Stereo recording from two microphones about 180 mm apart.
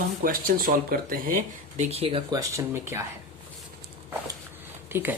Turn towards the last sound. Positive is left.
turn(degrees=-10)  # may be behind; listen again after turning